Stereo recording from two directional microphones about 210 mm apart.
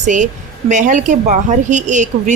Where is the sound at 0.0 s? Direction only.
35° right (ahead or behind).